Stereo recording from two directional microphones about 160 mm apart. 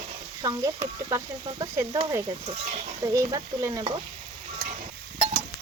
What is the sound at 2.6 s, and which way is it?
Speech, 45° right (ahead or behind).